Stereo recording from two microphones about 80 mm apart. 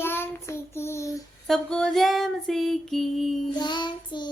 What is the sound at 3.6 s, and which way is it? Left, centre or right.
Child singing, left.